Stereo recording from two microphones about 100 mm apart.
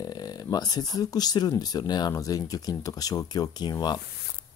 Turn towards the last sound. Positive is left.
turn(degrees=45)  # may be behind; listen again after turning